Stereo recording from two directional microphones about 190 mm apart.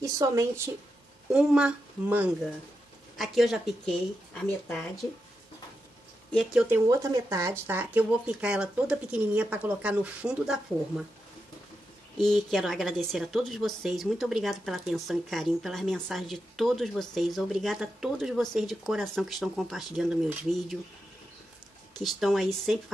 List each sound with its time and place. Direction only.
0.0 s speech: 15° right (ahead or behind)
1.3 s a woman's voice: 5° right (ahead or behind)
6.3 s a woman's voice: centre (ahead or behind)
6.9 s speech: 15° right (ahead or behind)
12.2 s a woman's voice: centre (ahead or behind)
22.0 s a woman's voice: centre (ahead or behind)